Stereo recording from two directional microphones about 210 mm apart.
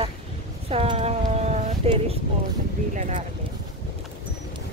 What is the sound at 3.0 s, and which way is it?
Speech, 35° right (ahead or behind).